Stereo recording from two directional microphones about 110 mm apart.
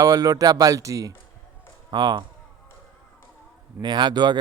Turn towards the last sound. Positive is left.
turn(degrees=-40)  # may be behind; listen again after turning